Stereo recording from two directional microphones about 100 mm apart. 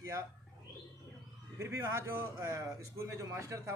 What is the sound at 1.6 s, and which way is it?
Speech, 30° right (ahead or behind).